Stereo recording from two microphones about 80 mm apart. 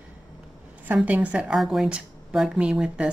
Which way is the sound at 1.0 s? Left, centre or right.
Centre.